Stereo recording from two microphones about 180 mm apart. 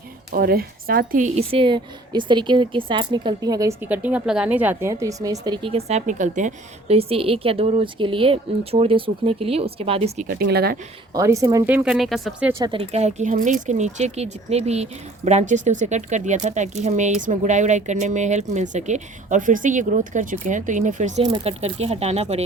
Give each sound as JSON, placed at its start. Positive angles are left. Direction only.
{"t": 0.3, "sound": "speech", "side_deg": -55}
{"t": 1.4, "sound": "a woman's voice", "side_deg": -30}
{"t": 5.5, "sound": "speech", "side_deg": -30}
{"t": 10.2, "sound": "speech", "side_deg": -60}
{"t": 11.1, "sound": "speech", "side_deg": -15}
{"t": 12.5, "sound": "a woman's voice", "side_deg": -25}
{"t": 12.9, "sound": "speech", "side_deg": -40}
{"t": 21.2, "sound": "a woman's voice", "side_deg": -25}
{"t": 21.6, "sound": "speech", "side_deg": -35}